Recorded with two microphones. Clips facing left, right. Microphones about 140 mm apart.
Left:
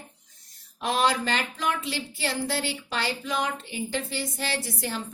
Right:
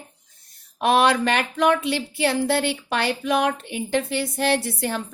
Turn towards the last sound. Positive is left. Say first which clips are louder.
# right 6 dB
turn(degrees=-60)  # may be behind; listen again after turning